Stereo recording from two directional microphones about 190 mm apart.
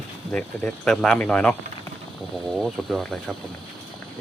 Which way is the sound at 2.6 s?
Centre (ahead or behind).